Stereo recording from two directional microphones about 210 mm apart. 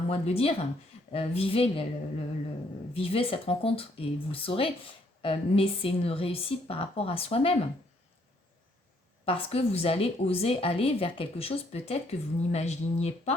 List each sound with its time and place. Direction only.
0.1 s a woman's voice: 30° left (ahead or behind)
2.9 s a woman's voice: 25° left (ahead or behind)
9.2 s a woman's voice: 25° left (ahead or behind)